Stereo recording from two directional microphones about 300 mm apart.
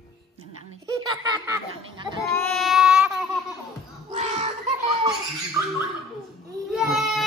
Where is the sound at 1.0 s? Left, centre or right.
Centre.